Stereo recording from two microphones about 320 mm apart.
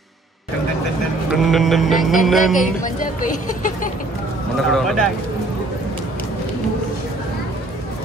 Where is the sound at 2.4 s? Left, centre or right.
Left.